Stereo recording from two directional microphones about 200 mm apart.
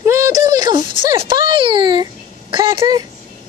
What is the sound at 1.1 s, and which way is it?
A child's voice, 25° right (ahead or behind).